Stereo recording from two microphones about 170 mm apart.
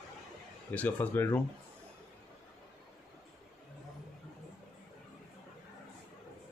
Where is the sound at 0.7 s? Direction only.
10° left (ahead or behind).